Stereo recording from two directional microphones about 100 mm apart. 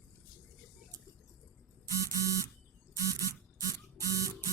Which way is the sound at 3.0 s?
35° left (ahead or behind).